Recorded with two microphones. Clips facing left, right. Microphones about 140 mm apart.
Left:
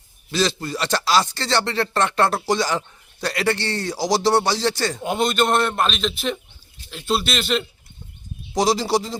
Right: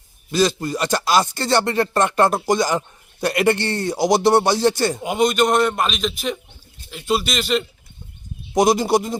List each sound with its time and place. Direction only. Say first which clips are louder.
0.3 s speech: right 4 dB; 10° right (ahead or behind)
3.9 s speech: right 4 dB; 55° right (ahead or behind)
4.8 s speech: right 3 dB; 10° right (ahead or behind)
5.6 s speech: right 1 dB; 5° right (ahead or behind)
8.5 s speech: right 3 dB; 50° right (ahead or behind)